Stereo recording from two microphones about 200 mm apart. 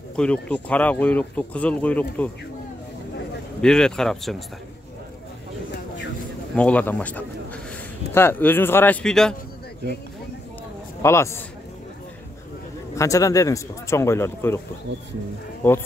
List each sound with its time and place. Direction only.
0.1 s speech: 5° left (ahead or behind)
3.6 s a man's voice: 5° left (ahead or behind)
6.5 s speech: 5° left (ahead or behind)
11.0 s speech: 15° left (ahead or behind)
12.9 s speech: 15° left (ahead or behind)
15.6 s speech: 10° left (ahead or behind)